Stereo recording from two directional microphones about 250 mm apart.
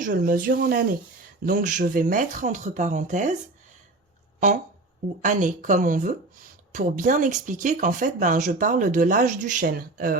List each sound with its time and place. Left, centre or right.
0.0 s speech: right
4.4 s speech: right